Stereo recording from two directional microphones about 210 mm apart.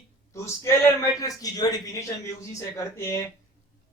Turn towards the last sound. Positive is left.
turn(degrees=15)  # may be behind; listen again after turning